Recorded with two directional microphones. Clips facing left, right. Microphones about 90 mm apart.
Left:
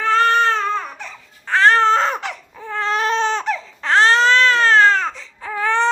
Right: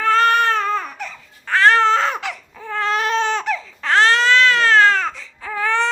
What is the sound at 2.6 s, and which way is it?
Baby cry, 20° left (ahead or behind).